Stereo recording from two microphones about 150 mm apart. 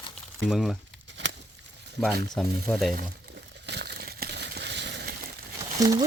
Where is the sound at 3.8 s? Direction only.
90° right.